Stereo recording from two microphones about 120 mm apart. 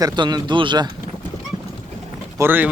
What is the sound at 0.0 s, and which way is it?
Speech, 35° right (ahead or behind).